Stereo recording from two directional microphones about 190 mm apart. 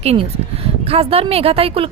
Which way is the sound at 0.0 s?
30° right (ahead or behind).